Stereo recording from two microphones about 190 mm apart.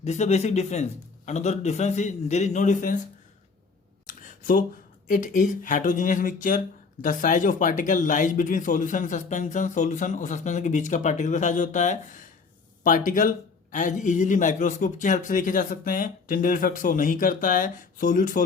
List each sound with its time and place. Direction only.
0.0 s speech: 35° left (ahead or behind)
4.0 s a sound: 45° left (ahead or behind)
5.0 s speech: 45° left (ahead or behind)